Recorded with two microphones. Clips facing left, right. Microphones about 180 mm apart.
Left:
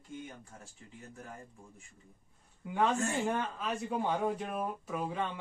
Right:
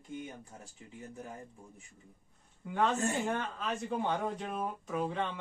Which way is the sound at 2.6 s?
10° left (ahead or behind).